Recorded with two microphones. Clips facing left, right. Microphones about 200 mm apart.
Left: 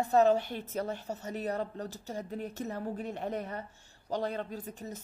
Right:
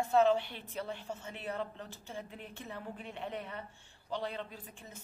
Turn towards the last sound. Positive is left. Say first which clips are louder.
# left 10 dB
turn(degrees=40)  # may be behind; listen again after turning